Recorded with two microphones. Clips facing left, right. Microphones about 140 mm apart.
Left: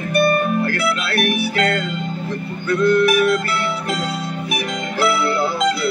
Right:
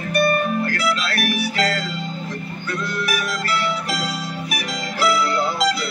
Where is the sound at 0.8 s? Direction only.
60° left (ahead or behind).